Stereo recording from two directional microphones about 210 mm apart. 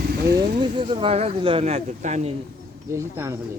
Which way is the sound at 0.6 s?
25° right (ahead or behind).